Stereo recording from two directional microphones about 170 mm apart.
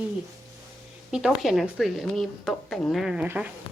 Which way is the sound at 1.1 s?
Centre (ahead or behind).